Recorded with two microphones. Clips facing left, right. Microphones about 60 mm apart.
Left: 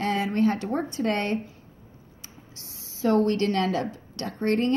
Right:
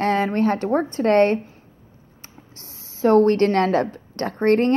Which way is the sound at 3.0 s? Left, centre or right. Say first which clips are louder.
Right 7 dB; right.